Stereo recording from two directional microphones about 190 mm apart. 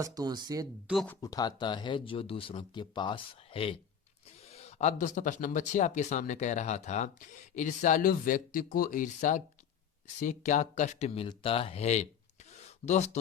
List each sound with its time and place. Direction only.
0.0 s speech: 20° right (ahead or behind)
1.0 s speech: 15° left (ahead or behind); by 12.0 s 35° left (ahead or behind)
12.5 s a sound: 35° left (ahead or behind)